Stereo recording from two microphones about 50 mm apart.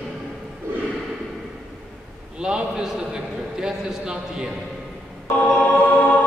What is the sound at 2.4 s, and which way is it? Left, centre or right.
A man's voice, centre.